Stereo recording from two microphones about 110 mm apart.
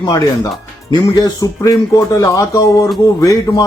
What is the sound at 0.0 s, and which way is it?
Speech, 35° left (ahead or behind).